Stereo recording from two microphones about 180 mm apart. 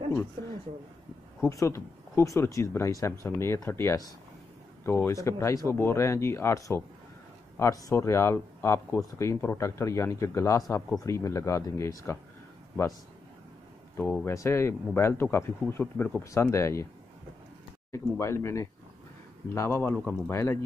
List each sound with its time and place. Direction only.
0.4 s a sound: 60° right (ahead or behind)
1.5 s speech: 15° left (ahead or behind)
13.9 s speech: 5° left (ahead or behind)
14.2 s speech: 15° left (ahead or behind)
17.9 s speech: 15° left (ahead or behind)